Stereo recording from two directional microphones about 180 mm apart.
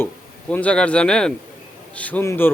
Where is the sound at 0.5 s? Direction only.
5° left (ahead or behind).